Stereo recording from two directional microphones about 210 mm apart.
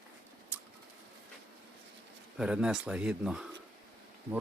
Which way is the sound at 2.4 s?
5° right (ahead or behind).